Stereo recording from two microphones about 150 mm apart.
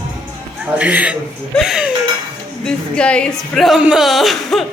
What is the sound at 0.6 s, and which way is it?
Music, 10° right (ahead or behind).